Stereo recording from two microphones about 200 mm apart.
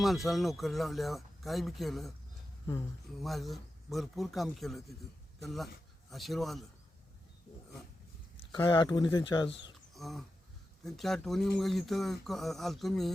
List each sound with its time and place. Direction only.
0.0 s speech: centre (ahead or behind)
3.2 s speech: centre (ahead or behind)
6.1 s speech: centre (ahead or behind)
8.5 s speech: 20° left (ahead or behind)
9.9 s a sound: centre (ahead or behind)
10.8 s speech: centre (ahead or behind)